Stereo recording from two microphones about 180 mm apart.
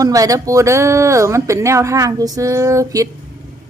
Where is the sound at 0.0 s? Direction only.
20° right (ahead or behind).